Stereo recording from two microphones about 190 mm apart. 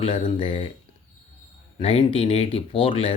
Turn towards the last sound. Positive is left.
turn(degrees=30)  # may be behind; listen again after turning